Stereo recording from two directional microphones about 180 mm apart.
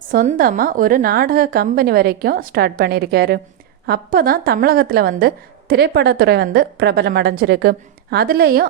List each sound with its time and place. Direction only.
0.1 s a woman's voice: 50° right (ahead or behind)